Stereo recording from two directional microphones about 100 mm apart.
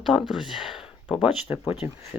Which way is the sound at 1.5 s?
25° right (ahead or behind).